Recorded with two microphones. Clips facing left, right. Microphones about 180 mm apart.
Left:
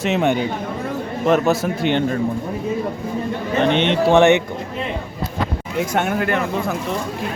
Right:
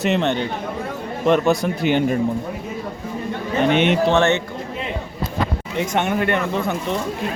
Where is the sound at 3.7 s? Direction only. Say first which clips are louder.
Right 2 dB; 10° right (ahead or behind).